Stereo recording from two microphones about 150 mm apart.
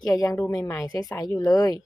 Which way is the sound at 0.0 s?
25° left (ahead or behind).